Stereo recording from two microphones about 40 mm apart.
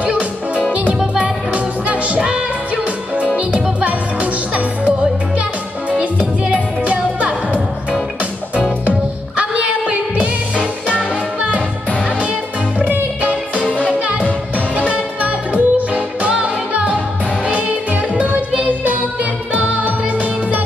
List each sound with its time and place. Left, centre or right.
0.0 s music: right
6.1 s music: right
10.2 s music: right
13.7 s music: right
18.1 s music: right